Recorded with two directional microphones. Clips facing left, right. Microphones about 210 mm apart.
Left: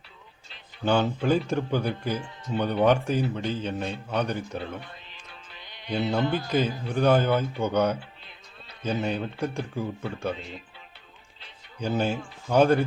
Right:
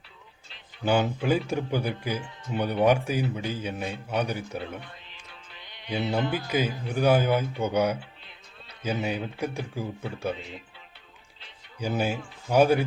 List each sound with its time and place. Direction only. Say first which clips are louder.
0.9 s speech: left 1 dB; 10° right (ahead or behind)
5.5 s music: left 1 dB; 40° left (ahead or behind)
5.9 s speech: left 2 dB; 5° right (ahead or behind)
11.8 s speech: left 1 dB; 10° right (ahead or behind)